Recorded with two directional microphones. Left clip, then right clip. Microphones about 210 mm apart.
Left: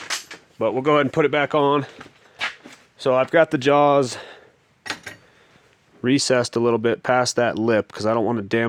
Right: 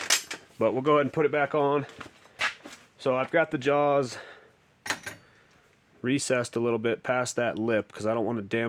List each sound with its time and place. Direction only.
0.8 s speech: 30° left (ahead or behind)
1.1 s speech: 55° left (ahead or behind)
3.0 s speech: 50° left (ahead or behind)
6.0 s speech: 35° left (ahead or behind)